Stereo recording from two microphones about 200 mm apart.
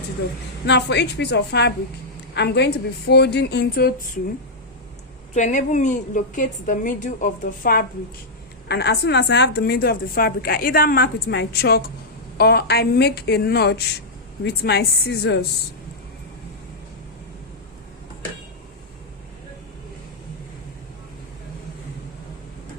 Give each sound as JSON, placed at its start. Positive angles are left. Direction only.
{"t": 0.6, "sound": "a woman's voice", "side_deg": 60}
{"t": 5.3, "sound": "a woman's voice", "side_deg": 40}